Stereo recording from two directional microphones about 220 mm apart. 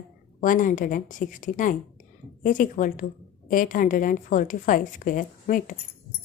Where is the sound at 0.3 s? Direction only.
35° left (ahead or behind).